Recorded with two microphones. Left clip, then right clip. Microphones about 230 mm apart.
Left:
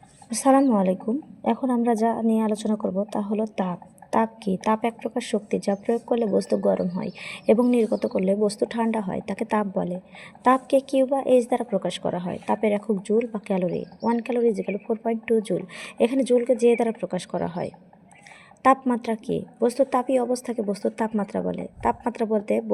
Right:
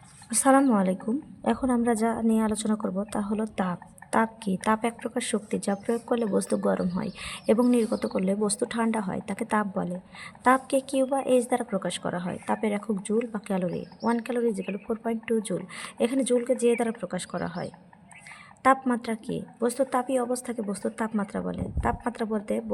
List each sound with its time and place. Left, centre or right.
0.3 s speech: centre
1.5 s a woman's voice: right
1.9 s speech: centre
2.7 s speech: centre
3.1 s a woman's voice: centre